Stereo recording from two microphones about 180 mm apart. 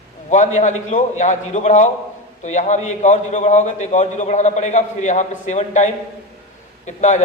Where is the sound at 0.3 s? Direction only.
40° left (ahead or behind).